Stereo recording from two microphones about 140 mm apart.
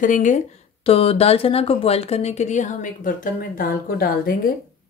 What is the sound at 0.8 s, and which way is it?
Speech, 45° left (ahead or behind).